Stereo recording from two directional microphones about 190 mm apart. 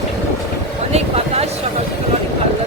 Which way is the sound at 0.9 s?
35° right (ahead or behind).